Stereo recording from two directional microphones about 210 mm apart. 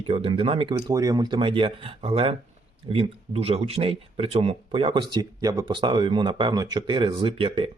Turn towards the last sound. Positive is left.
turn(degrees=-25)  # may be behind; listen again after turning